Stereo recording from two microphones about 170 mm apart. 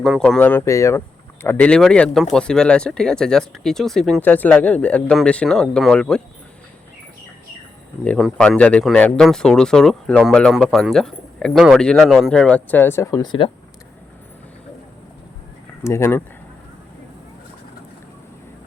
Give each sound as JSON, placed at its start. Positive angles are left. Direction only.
{"t": 0.0, "sound": "speech", "side_deg": 0}
{"t": 8.0, "sound": "speech", "side_deg": 5}
{"t": 15.8, "sound": "speech", "side_deg": 15}